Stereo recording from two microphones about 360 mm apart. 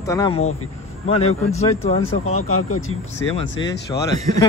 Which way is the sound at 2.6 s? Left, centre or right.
Left.